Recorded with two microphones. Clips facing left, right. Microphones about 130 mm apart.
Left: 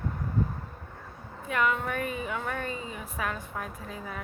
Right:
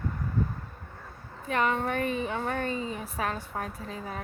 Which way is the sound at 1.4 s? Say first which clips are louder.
Right 1 dB; 30° right (ahead or behind).